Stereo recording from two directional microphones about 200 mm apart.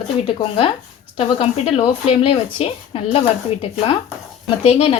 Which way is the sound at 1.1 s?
30° left (ahead or behind).